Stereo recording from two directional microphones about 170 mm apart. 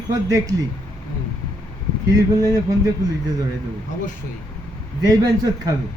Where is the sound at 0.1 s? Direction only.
20° right (ahead or behind).